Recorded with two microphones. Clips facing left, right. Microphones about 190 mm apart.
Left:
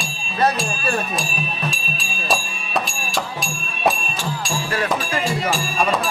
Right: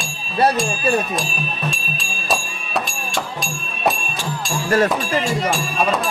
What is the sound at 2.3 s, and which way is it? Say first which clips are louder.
Music: even; centre (ahead or behind).